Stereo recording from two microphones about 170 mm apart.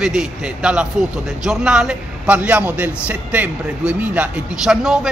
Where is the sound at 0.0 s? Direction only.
5° right (ahead or behind).